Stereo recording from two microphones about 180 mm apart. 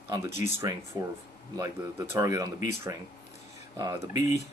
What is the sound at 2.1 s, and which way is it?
Speech, 20° right (ahead or behind).